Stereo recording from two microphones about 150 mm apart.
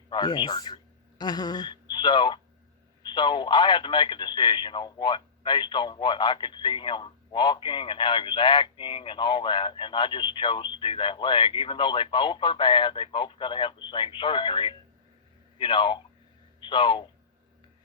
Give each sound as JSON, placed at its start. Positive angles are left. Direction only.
{"t": 0.1, "sound": "speech", "side_deg": 30}